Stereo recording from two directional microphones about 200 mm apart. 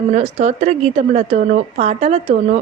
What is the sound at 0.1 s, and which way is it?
A woman's voice, 35° right (ahead or behind).